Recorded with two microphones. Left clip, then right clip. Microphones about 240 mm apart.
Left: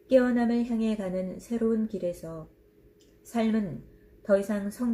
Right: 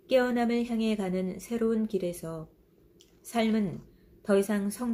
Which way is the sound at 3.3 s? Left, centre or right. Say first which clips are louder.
Even; right.